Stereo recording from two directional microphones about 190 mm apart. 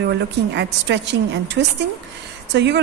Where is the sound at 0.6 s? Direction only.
65° right (ahead or behind).